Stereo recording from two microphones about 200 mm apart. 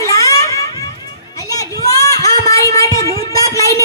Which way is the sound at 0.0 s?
15° left (ahead or behind).